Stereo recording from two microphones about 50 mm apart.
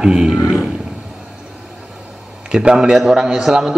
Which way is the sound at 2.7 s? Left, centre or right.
Centre.